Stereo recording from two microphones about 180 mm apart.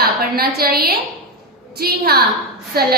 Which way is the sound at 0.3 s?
60° right (ahead or behind).